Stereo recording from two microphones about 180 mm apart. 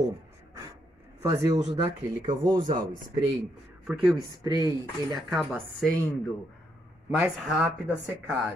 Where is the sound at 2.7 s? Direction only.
50° right (ahead or behind).